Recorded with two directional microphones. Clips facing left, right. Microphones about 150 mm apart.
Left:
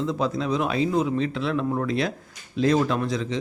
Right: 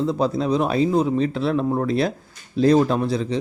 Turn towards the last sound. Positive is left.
turn(degrees=-35)  # may be behind; listen again after turning